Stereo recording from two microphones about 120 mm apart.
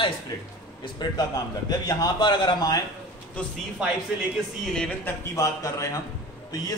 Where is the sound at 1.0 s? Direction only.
35° left (ahead or behind).